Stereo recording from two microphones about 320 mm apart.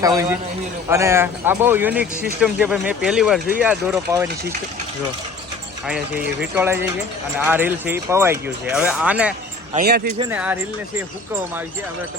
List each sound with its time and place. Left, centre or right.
0.0 s a man's voice: centre
5.8 s speech: centre
9.7 s speech: right
10.2 s speech: centre